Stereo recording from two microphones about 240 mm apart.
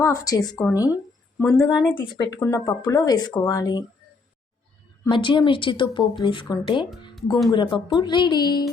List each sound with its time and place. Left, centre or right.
0.0 s speech: centre
1.6 s speech: centre
5.0 s speech: centre